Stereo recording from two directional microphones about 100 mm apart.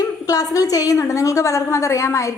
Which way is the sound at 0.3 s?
35° left (ahead or behind).